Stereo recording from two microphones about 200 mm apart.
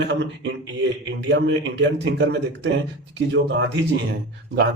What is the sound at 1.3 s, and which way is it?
Speech, 65° right (ahead or behind).